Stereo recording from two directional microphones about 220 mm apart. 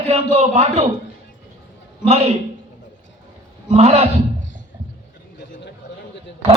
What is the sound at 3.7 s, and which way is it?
Speech, 30° right (ahead or behind).